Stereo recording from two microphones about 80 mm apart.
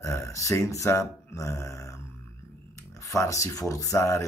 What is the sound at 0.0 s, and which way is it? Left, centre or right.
Speech, left.